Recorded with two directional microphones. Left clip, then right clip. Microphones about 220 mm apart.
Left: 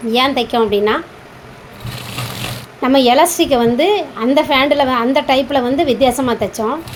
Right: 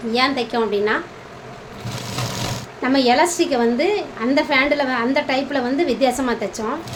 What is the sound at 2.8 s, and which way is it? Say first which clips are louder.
A woman's voice: left 5 dB; 30° left (ahead or behind).